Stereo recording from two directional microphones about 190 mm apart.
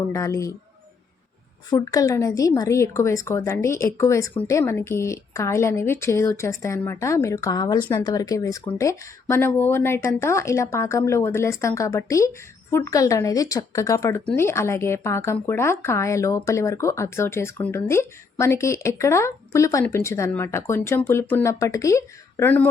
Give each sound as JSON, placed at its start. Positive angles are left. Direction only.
{"t": 0.1, "sound": "speech", "side_deg": 15}
{"t": 1.7, "sound": "speech", "side_deg": 20}